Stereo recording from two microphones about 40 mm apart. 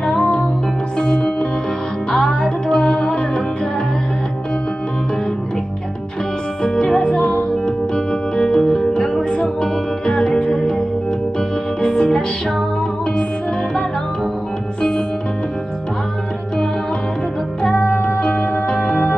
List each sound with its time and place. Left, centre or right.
0.2 s music: left
6.6 s music: centre
14.8 s music: left
17.7 s music: left
18.2 s music: left